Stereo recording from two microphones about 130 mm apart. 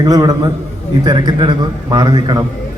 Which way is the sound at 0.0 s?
30° right (ahead or behind).